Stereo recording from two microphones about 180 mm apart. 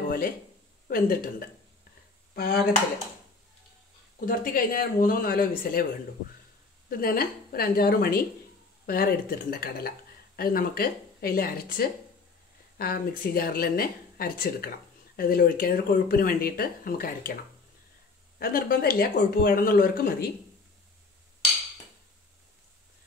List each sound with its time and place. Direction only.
0.8 s speech: 55° left (ahead or behind)
2.3 s speech: 60° left (ahead or behind)
4.3 s speech: 50° left (ahead or behind)
6.9 s speech: 55° left (ahead or behind)
18.4 s speech: 55° left (ahead or behind)